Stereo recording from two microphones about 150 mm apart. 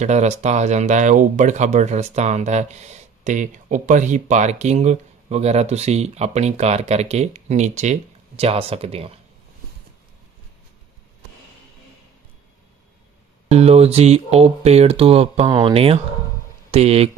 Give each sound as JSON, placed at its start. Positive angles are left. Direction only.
{"t": 0.0, "sound": "speech", "side_deg": -50}
{"t": 13.5, "sound": "speech", "side_deg": -45}